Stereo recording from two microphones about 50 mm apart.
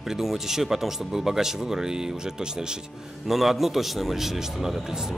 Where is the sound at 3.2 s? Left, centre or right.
Centre.